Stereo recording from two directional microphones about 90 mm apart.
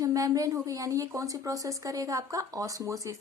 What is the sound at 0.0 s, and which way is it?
Speech, 40° right (ahead or behind).